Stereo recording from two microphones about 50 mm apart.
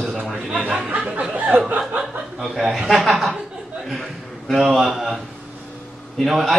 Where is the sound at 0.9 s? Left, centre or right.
Right.